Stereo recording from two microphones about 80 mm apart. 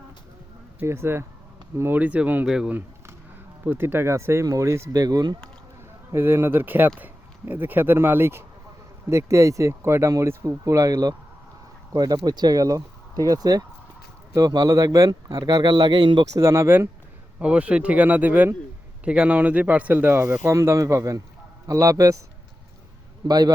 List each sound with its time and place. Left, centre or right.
0.9 s speech: right
2.0 s speech: right
3.6 s speech: right
4.9 s speech: right
6.1 s speech: right
15.4 s speech: right
16.2 s speech: right
17.4 s speech: centre
20.4 s speech: right
23.2 s speech: right